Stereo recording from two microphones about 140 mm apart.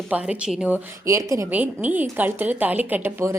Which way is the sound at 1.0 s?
20° right (ahead or behind).